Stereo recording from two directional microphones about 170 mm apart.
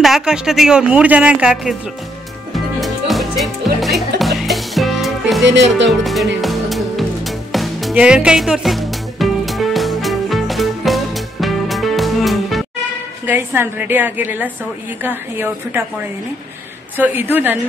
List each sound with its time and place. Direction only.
0.0 s speech: 5° right (ahead or behind)
2.5 s music: centre (ahead or behind)
5.4 s speech: 90° right
5.9 s music: centre (ahead or behind)
13.3 s a woman's voice: 15° right (ahead or behind)
16.9 s a woman's voice: 10° right (ahead or behind)